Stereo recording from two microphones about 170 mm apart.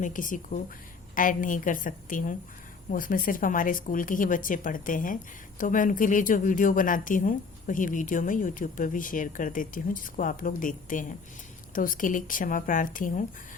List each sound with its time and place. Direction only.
0.0 s speech: 50° left (ahead or behind)